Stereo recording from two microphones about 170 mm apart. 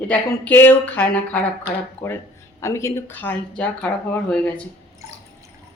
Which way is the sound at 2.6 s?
15° left (ahead or behind).